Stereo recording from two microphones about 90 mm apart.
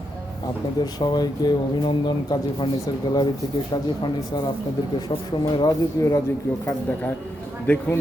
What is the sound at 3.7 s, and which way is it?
Speech, 55° left (ahead or behind).